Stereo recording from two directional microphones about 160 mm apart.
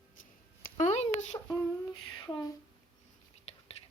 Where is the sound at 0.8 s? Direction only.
45° left (ahead or behind).